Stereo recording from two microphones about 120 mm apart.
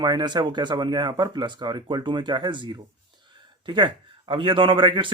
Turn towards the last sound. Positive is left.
turn(degrees=-45)  # may be behind; listen again after turning